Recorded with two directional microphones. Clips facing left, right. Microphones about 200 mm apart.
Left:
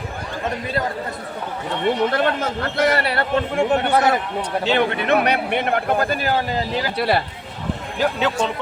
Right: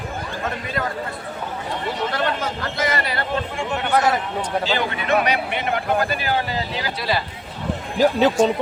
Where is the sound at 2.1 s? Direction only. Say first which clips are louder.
Left 3 dB; 60° left (ahead or behind).